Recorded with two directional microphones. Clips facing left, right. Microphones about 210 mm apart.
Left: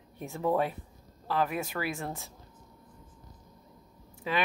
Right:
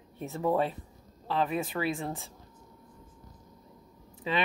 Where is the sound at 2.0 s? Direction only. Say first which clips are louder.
Right 2 dB; centre (ahead or behind).